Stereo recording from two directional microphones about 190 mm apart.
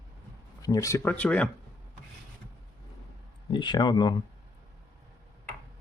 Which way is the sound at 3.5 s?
25° left (ahead or behind).